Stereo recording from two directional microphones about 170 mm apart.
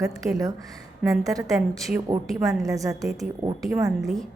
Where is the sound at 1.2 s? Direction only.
20° right (ahead or behind).